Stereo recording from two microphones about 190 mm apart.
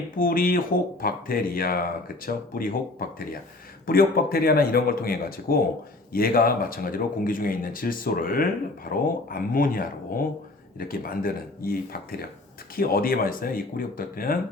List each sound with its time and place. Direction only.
0.2 s speech: 45° left (ahead or behind)